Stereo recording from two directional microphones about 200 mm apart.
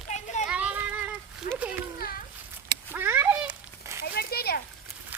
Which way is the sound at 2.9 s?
10° right (ahead or behind).